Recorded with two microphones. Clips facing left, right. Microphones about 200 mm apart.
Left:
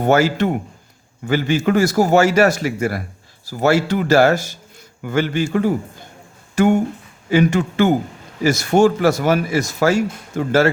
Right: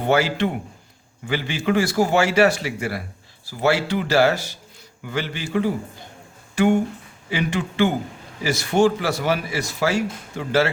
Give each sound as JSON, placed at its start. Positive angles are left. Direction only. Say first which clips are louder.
{"t": 0.0, "sound": "speech", "louder": "left 4 dB", "side_deg": 45}